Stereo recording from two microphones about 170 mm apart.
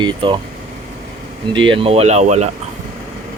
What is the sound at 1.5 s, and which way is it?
Speech, 30° right (ahead or behind).